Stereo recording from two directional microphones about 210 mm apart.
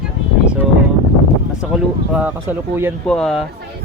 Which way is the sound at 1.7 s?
5° right (ahead or behind).